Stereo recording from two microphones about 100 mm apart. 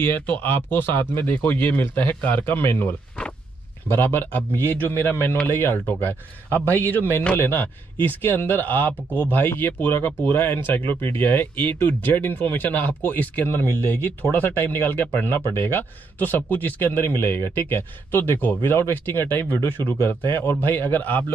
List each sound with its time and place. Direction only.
0.0 s speech: 20° left (ahead or behind)